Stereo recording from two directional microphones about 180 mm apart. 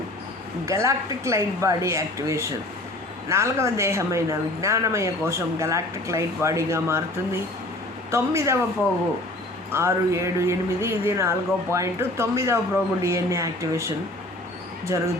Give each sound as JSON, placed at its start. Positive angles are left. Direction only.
{"t": 0.6, "sound": "speech", "side_deg": -15}
{"t": 8.1, "sound": "speech", "side_deg": -15}
{"t": 9.7, "sound": "speech", "side_deg": -15}